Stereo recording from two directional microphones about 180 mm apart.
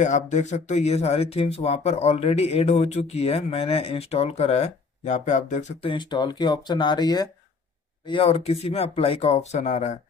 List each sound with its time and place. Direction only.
0.0 s speech: 40° left (ahead or behind)